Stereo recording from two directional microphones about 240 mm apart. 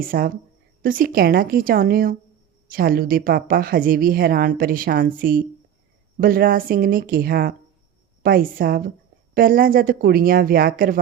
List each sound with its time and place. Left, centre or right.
0.0 s a woman's voice: right